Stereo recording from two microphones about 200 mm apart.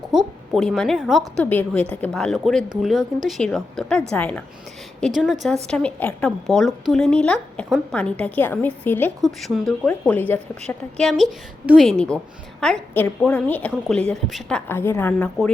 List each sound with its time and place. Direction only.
0.1 s a woman's voice: centre (ahead or behind)